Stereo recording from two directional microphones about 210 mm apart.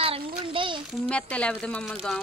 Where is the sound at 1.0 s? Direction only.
5° left (ahead or behind).